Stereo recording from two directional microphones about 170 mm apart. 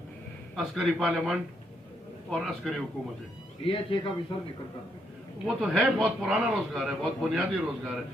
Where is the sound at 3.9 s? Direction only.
30° left (ahead or behind).